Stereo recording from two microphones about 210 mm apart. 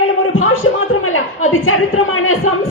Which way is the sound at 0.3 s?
80° left.